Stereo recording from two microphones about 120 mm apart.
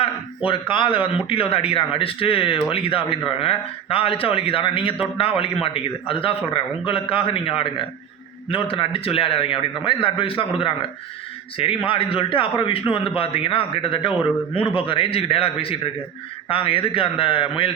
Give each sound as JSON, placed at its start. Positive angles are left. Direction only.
{"t": 0.0, "sound": "a man's voice", "side_deg": 45}